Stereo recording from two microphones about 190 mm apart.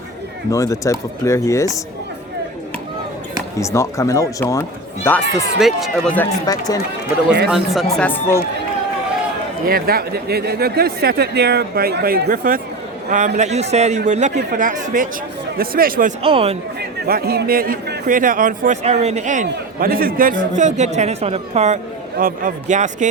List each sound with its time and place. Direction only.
0.5 s speech: 15° left (ahead or behind)
3.6 s speech: 15° left (ahead or behind)
5.5 s speech: centre (ahead or behind)
6.4 s speech: 20° left (ahead or behind)
7.5 s speech: centre (ahead or behind)
7.9 s speech: 10° left (ahead or behind)
9.6 s a woman's voice: 50° right (ahead or behind)
16.2 s a woman's voice: 30° right (ahead or behind)
17.1 s a man's voice: 50° right (ahead or behind); by 21.8 s 35° right (ahead or behind)
22.2 s a man's voice: 45° right (ahead or behind)